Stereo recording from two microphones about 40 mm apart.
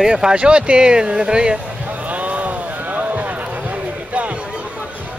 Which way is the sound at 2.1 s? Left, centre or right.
Right.